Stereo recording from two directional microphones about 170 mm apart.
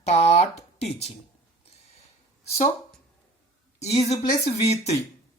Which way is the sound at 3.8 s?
40° left (ahead or behind).